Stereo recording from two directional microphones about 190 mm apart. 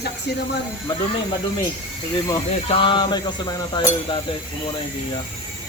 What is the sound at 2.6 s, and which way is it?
Speech, 30° left (ahead or behind).